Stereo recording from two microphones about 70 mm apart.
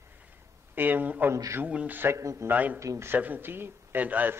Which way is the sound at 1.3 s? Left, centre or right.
Right.